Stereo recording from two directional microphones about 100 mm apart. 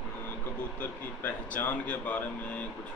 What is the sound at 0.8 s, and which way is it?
Speech, 20° left (ahead or behind).